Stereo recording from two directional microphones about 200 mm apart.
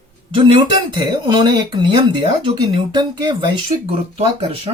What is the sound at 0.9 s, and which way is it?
Speech, 20° right (ahead or behind).